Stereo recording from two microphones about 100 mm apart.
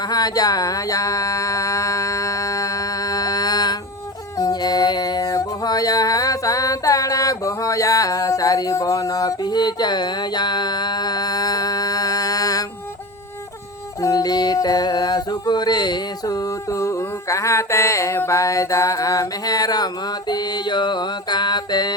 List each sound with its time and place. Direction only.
0.0 s a sound: 40° left (ahead or behind)
4.4 s music: 40° left (ahead or behind)
14.0 s music: 40° left (ahead or behind)